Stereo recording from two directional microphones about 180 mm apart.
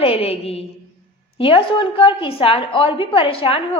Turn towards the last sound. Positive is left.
turn(degrees=30)  # may be behind; listen again after turning